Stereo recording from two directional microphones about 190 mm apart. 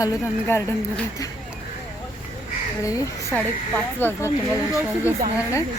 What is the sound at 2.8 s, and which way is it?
Speech, 15° left (ahead or behind).